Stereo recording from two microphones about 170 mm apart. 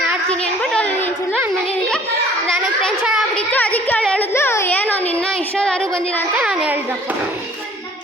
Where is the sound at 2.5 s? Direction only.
Centre (ahead or behind).